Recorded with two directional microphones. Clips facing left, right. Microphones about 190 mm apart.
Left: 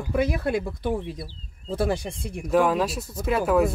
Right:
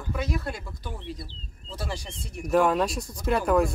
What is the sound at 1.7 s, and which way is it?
Speech, 55° left (ahead or behind).